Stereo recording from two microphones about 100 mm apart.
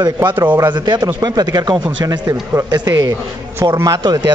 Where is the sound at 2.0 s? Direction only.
35° right (ahead or behind).